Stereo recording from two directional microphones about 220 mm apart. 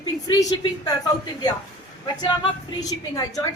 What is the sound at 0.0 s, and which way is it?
A woman's voice, 20° left (ahead or behind).